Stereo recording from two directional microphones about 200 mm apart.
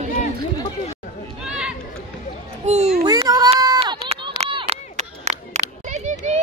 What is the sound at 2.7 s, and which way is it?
Children playing, 35° right (ahead or behind).